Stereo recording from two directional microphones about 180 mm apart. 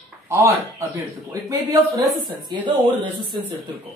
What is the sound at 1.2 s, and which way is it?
Speech, 20° right (ahead or behind).